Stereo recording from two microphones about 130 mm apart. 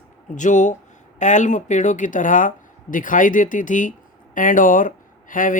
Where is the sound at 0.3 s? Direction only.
75° left (ahead or behind).